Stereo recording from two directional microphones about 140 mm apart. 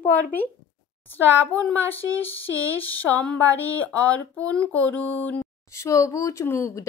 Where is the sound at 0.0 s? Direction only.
10° left (ahead or behind).